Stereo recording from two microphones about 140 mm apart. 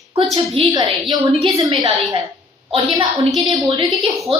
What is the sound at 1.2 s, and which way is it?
A woman's voice, 40° right (ahead or behind).